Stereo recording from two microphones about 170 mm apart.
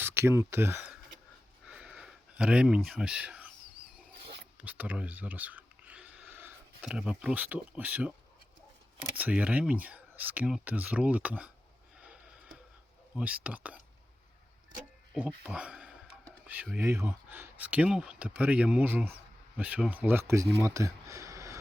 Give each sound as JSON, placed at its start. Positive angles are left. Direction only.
{"t": 0.0, "sound": "speech", "side_deg": -15}
{"t": 1.6, "sound": "a sound", "side_deg": -5}
{"t": 4.6, "sound": "speech", "side_deg": -10}
{"t": 9.1, "sound": "speech", "side_deg": -10}
{"t": 13.1, "sound": "speech", "side_deg": -5}
{"t": 15.4, "sound": "speech", "side_deg": -5}
{"t": 20.6, "sound": "a sound", "side_deg": -15}